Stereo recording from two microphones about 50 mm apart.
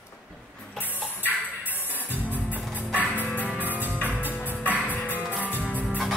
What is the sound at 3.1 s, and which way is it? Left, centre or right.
Music, left.